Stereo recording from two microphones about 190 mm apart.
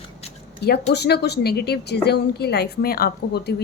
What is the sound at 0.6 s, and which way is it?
A woman's voice, 60° left (ahead or behind).